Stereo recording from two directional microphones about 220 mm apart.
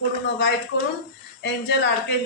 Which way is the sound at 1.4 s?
55° left (ahead or behind).